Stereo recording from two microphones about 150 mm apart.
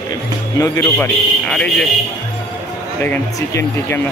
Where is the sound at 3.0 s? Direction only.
15° left (ahead or behind).